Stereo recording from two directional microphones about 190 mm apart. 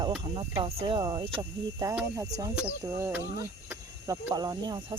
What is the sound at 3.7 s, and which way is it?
Cricket, 10° right (ahead or behind).